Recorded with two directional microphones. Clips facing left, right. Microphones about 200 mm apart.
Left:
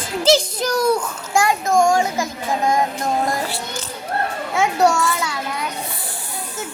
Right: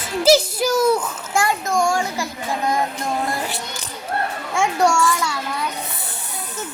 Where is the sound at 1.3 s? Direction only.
15° left (ahead or behind).